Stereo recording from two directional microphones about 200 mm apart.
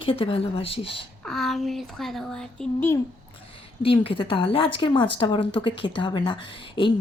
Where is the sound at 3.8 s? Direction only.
25° left (ahead or behind).